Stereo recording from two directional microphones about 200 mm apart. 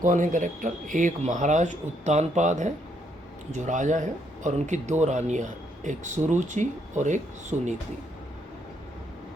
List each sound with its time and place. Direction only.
0.0 s speech: 40° right (ahead or behind)